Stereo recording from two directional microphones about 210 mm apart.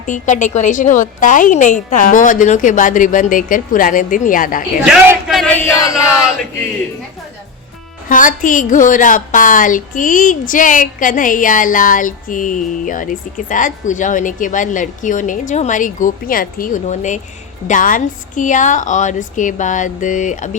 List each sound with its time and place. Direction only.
0.0 s a woman's voice: 35° left (ahead or behind)
4.9 s a sound: centre (ahead or behind); by 5.9 s 15° left (ahead or behind)
8.1 s a woman's voice: 40° left (ahead or behind)